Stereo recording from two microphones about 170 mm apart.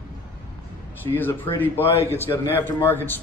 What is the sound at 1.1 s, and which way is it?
Speech, 15° left (ahead or behind).